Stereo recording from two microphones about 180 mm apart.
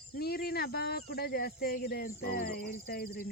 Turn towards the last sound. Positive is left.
turn(degrees=60)  # may be behind; listen again after turning